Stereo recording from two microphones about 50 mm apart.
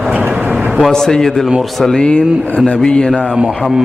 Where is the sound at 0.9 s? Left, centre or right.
Centre.